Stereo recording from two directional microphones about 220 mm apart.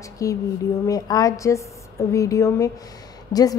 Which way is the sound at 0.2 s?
15° left (ahead or behind).